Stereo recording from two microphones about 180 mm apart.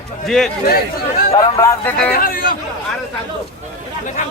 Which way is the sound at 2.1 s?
55° left (ahead or behind).